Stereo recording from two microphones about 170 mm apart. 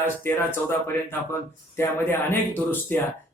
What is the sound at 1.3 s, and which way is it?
Speech, 15° left (ahead or behind).